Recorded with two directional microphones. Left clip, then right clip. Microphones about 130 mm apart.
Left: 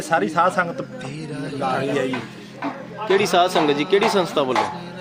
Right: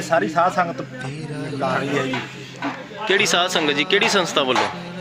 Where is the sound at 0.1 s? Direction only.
45° left (ahead or behind).